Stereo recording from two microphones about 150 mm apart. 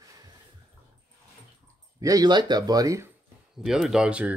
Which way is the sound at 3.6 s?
Centre (ahead or behind).